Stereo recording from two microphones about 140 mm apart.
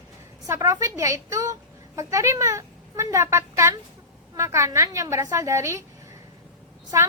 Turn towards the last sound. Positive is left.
turn(degrees=-20)  # may be behind; listen again after turning